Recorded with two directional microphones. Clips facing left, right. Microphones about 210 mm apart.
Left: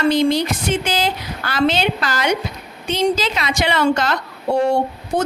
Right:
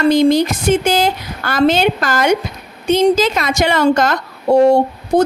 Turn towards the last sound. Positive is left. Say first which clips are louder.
# right 6 dB
turn(degrees=-40)  # may be behind; listen again after turning